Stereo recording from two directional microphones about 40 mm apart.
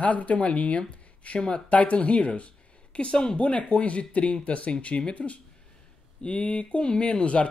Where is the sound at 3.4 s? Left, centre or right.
Left.